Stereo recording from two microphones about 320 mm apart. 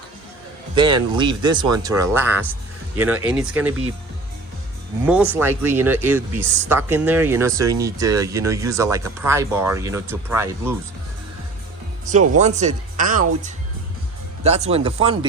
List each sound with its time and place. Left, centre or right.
0.8 s speech: centre
5.0 s speech: centre
12.4 s speech: right